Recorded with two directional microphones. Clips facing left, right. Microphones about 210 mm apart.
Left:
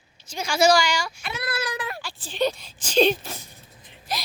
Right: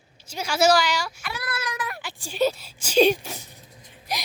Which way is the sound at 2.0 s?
15° right (ahead or behind).